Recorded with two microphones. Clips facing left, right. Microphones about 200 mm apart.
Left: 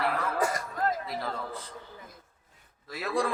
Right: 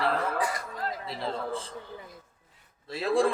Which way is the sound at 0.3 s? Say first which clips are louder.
Left 2 dB; 45° left (ahead or behind).